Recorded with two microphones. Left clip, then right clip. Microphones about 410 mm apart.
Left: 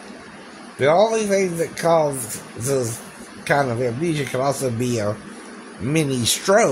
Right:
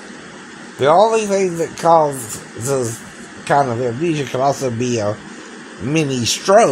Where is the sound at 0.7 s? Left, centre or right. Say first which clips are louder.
Right 4 dB; left.